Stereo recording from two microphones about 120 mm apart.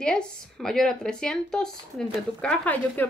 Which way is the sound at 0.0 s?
5° left (ahead or behind).